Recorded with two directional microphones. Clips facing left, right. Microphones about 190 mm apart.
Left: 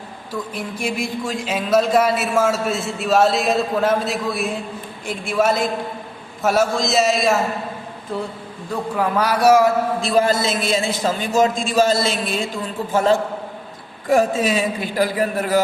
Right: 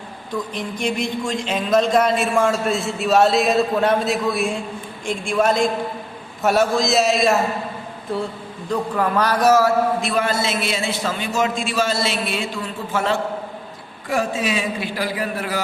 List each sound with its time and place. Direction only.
0.3 s speech: 5° left (ahead or behind)
10.0 s a man's voice: 35° left (ahead or behind)